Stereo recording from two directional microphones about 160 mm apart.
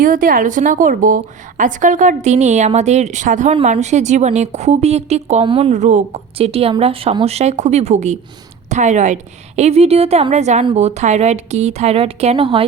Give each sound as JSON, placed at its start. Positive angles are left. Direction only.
{"t": 0.0, "sound": "a woman's voice", "side_deg": -60}